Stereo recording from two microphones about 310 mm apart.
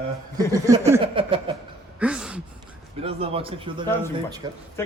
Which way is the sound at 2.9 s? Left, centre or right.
Centre.